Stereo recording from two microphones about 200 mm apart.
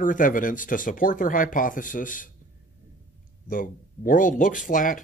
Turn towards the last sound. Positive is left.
turn(degrees=40)  # may be behind; listen again after turning